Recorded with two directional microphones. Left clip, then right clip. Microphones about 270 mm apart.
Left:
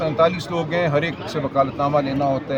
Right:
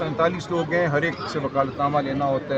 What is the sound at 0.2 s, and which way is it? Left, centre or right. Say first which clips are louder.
Speech: left 3 dB; centre.